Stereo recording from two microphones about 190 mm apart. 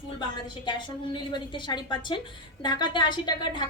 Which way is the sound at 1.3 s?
25° left (ahead or behind).